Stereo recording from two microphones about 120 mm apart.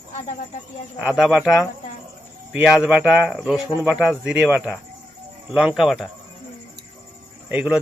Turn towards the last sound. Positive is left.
turn(degrees=-10)  # may be behind; listen again after turning